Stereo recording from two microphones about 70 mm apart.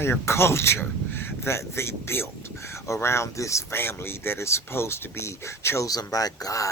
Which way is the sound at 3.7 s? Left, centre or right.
Left.